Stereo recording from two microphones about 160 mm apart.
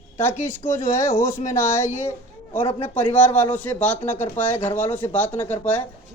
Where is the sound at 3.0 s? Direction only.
10° left (ahead or behind).